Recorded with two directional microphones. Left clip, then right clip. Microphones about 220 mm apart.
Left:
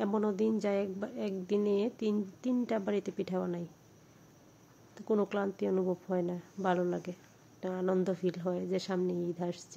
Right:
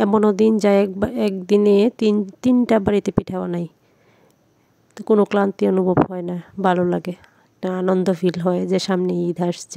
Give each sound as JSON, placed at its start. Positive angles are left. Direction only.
{"t": 0.0, "sound": "a woman's voice", "side_deg": -50}
{"t": 4.9, "sound": "a woman's voice", "side_deg": -50}